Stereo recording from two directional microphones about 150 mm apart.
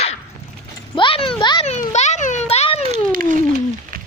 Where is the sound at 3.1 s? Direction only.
65° right (ahead or behind).